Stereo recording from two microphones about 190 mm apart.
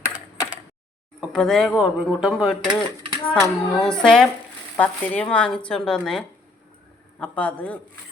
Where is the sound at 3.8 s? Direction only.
5° left (ahead or behind).